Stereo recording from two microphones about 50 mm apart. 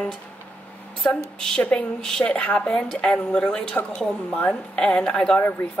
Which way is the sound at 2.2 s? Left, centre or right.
Left.